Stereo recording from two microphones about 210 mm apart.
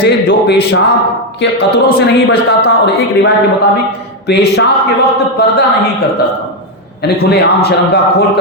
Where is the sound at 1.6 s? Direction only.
50° left (ahead or behind).